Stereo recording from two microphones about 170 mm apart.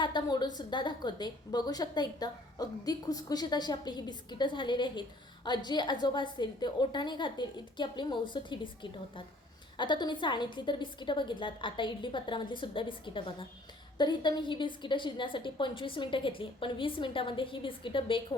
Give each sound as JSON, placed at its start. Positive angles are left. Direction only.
{"t": 0.0, "sound": "a woman's voice", "side_deg": 25}